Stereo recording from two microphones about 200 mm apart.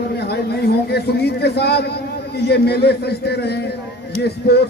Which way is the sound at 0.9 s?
55° left (ahead or behind).